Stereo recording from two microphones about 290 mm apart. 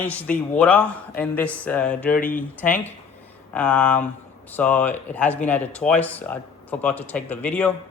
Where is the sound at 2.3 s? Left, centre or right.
Left.